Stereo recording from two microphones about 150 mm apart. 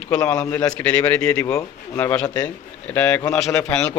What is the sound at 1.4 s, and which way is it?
Speech, 15° left (ahead or behind).